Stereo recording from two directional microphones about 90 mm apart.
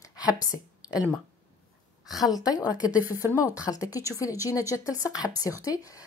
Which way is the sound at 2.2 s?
45° left (ahead or behind).